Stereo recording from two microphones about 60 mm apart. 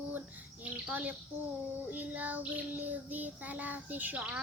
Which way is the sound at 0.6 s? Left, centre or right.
Right.